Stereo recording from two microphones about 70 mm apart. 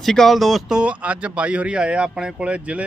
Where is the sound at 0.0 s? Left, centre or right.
Centre.